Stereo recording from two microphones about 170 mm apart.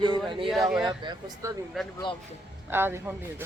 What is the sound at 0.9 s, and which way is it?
Speech, 20° right (ahead or behind).